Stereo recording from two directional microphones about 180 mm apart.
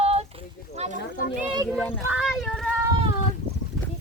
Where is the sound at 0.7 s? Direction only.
35° right (ahead or behind).